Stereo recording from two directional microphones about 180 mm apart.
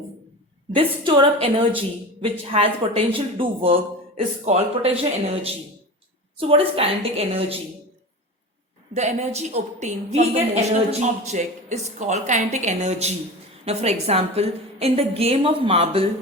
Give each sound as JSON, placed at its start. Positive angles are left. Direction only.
{"t": 0.7, "sound": "a woman's voice", "side_deg": -30}
{"t": 9.0, "sound": "a woman's voice", "side_deg": -35}